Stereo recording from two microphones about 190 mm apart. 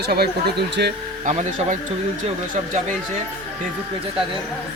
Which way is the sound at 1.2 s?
35° right (ahead or behind).